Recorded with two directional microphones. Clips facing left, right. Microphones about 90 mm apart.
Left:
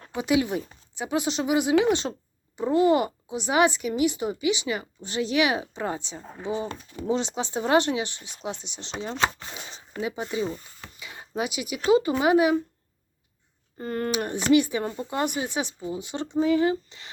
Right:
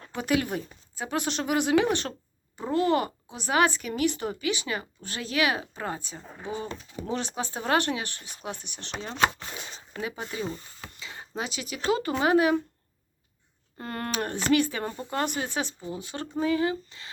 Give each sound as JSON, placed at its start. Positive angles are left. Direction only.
{"t": 0.9, "sound": "speech", "side_deg": 15}
{"t": 13.7, "sound": "speech", "side_deg": 0}
{"t": 14.1, "sound": "speech", "side_deg": 15}